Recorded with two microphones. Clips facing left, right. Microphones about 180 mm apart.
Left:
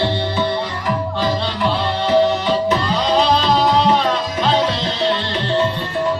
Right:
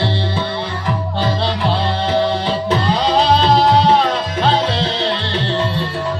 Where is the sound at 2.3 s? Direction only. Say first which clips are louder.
Left 1 dB; 30° right (ahead or behind).